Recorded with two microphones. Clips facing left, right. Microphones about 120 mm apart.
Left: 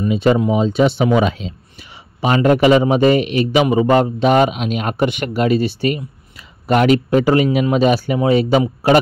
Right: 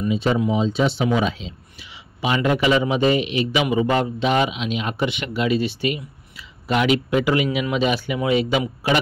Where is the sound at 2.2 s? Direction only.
45° left (ahead or behind).